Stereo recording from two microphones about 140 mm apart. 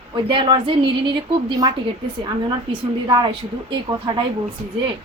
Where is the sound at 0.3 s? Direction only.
35° right (ahead or behind).